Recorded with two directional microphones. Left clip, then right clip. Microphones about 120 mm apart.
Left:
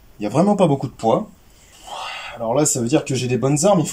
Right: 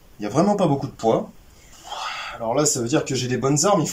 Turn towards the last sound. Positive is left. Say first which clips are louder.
# left 3 dB
turn(degrees=25)  # may be behind; listen again after turning